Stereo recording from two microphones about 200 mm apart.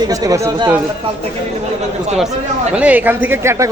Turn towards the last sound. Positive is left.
turn(degrees=-15)  # may be behind; listen again after turning